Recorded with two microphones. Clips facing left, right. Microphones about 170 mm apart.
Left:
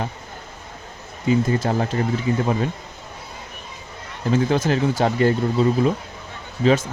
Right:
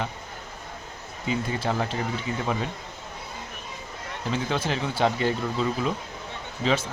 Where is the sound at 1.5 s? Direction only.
45° left (ahead or behind).